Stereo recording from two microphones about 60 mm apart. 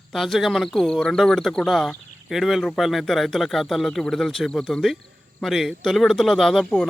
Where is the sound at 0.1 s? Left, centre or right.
Centre.